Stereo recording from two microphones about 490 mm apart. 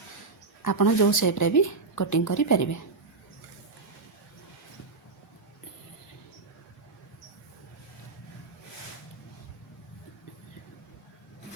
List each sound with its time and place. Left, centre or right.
0.6 s a woman's voice: left